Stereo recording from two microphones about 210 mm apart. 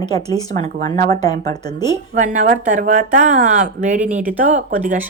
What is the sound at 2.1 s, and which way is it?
Speech, 35° right (ahead or behind).